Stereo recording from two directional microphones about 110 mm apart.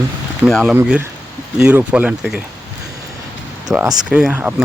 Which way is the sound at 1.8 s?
10° right (ahead or behind).